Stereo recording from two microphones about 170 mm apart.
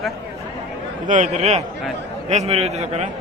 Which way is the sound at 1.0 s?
45° right (ahead or behind).